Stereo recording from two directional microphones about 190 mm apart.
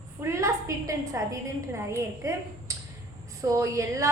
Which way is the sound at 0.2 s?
15° right (ahead or behind).